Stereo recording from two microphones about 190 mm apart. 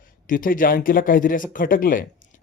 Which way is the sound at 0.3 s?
45° left (ahead or behind).